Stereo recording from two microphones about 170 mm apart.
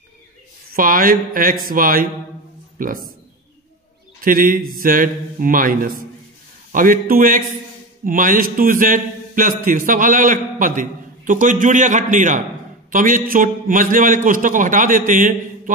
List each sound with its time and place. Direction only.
0.7 s a man's voice: 55° right (ahead or behind)
4.2 s a man's voice: 55° right (ahead or behind)